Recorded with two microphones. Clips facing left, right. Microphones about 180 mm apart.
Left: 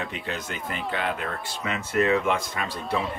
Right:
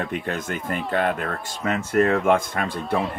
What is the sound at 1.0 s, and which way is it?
Speech, 50° right (ahead or behind).